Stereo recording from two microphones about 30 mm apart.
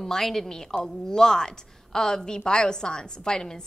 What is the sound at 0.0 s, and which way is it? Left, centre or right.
A woman's voice, centre.